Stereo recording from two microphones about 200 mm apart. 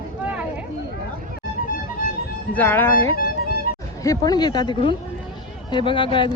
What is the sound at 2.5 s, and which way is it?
Speech, 10° left (ahead or behind).